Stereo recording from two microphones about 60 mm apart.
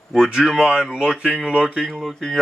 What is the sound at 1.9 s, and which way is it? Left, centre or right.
Speech, centre.